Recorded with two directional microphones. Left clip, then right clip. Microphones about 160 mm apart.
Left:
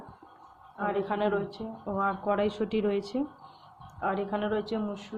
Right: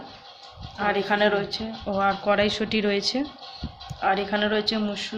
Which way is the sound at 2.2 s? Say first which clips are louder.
Right 6 dB; 5° left (ahead or behind).